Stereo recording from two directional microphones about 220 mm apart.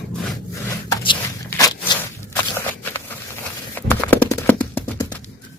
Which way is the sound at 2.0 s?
10° left (ahead or behind).